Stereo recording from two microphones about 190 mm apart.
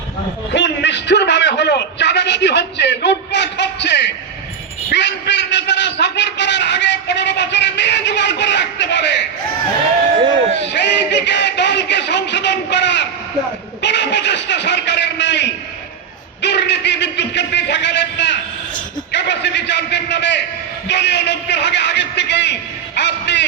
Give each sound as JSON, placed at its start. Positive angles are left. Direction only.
{"t": 0.5, "sound": "a man's voice", "side_deg": 70}
{"t": 10.7, "sound": "a man's voice", "side_deg": 65}
{"t": 13.8, "sound": "a sound", "side_deg": 65}
{"t": 19.1, "sound": "a man's voice", "side_deg": 65}
{"t": 23.0, "sound": "music", "side_deg": 65}